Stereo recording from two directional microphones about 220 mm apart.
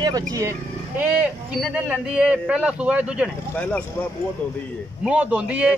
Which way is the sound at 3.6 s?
5° left (ahead or behind).